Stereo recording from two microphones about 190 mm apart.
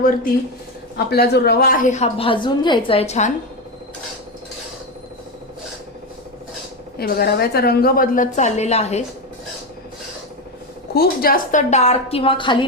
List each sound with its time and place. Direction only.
0.9 s a woman's voice: 55° left (ahead or behind); by 3.3 s 35° left (ahead or behind)
7.0 s a woman's voice: 55° left (ahead or behind); by 9.0 s 35° left (ahead or behind)
10.9 s a woman's voice: 50° left (ahead or behind); by 12.6 s 25° left (ahead or behind)